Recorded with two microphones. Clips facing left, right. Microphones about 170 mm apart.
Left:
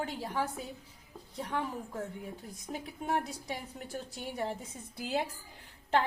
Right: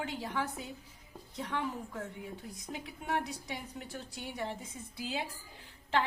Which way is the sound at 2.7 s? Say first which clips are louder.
Left 3 dB; 40° left (ahead or behind).